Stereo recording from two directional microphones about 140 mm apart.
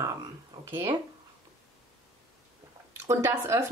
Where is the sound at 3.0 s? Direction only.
20° right (ahead or behind).